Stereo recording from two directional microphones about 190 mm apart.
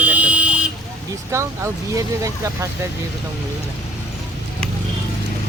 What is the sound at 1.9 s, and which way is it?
Speech, 15° right (ahead or behind).